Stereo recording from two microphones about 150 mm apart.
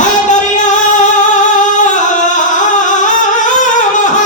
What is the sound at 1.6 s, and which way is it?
Singing, 55° left (ahead or behind).